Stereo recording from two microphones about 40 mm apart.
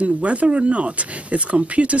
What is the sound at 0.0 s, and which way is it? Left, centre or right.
Speech, right.